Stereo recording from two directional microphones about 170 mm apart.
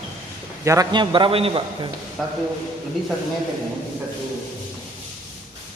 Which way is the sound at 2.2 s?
Centre (ahead or behind).